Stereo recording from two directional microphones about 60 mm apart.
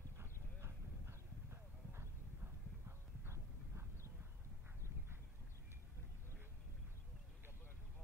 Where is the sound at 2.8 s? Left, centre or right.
Right.